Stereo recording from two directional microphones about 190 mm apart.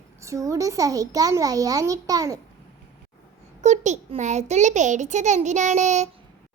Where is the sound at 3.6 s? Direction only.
40° right (ahead or behind).